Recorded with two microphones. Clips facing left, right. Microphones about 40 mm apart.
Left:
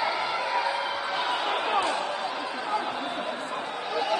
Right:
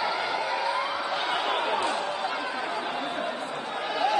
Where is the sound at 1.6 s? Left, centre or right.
Left.